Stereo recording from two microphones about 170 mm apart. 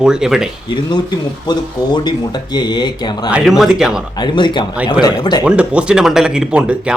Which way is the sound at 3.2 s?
5° right (ahead or behind).